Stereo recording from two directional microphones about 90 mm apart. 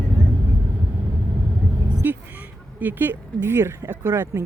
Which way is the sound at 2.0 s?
20° right (ahead or behind).